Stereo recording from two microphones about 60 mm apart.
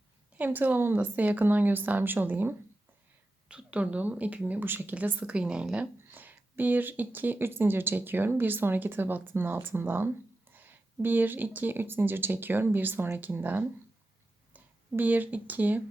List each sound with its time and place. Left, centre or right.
0.3 s speech: right
3.5 s speech: centre
4.6 s speech: right; by 5.6 s centre
6.1 s speech: right